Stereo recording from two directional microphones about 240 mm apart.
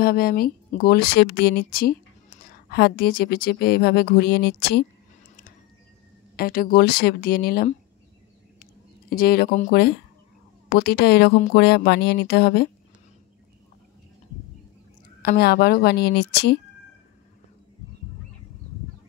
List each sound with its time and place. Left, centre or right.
0.0 s speech: left
6.3 s speech: left
9.1 s speech: left
15.2 s speech: left